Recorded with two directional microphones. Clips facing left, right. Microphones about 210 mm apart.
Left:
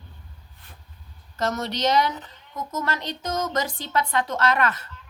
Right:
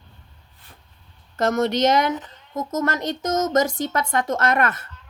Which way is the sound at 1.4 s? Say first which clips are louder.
Right 6 dB; 50° right (ahead or behind).